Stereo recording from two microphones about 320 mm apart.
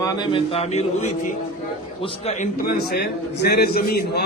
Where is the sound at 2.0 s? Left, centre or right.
Left.